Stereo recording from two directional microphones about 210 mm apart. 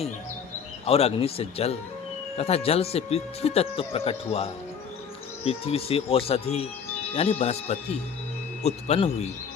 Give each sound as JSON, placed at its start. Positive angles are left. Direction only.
{"t": 0.9, "sound": "speech", "side_deg": 30}
{"t": 5.5, "sound": "speech", "side_deg": 30}